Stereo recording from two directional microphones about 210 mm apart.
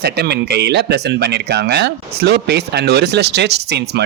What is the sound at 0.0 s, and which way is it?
Speech, 50° right (ahead or behind).